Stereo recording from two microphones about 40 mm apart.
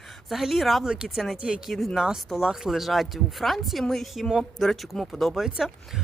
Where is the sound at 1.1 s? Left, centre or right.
Centre.